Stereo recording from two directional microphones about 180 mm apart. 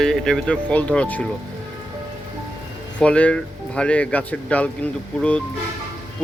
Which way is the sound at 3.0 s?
5° left (ahead or behind).